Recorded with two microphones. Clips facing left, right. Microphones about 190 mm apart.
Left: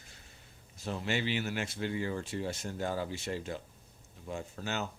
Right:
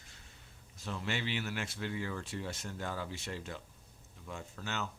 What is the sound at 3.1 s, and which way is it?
Speech, centre (ahead or behind).